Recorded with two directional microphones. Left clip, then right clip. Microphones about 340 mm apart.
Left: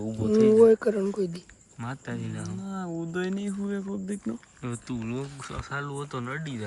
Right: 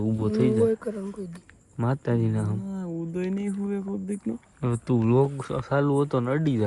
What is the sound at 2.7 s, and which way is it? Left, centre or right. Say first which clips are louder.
Speech: even; centre.